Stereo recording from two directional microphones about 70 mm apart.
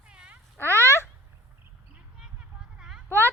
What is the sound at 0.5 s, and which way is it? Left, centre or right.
Speech, left.